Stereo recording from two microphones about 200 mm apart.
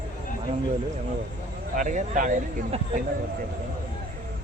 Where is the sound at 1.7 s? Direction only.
40° right (ahead or behind).